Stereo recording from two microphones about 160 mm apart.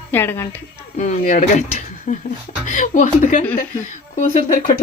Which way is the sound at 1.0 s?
50° left (ahead or behind).